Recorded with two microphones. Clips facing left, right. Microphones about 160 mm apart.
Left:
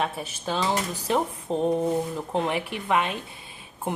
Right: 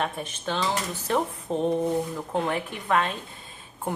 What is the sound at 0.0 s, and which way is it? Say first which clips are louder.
Speech: left 1 dB; 5° left (ahead or behind).